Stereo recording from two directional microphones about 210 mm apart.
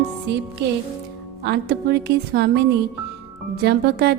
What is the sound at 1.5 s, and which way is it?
A woman's voice, 50° right (ahead or behind).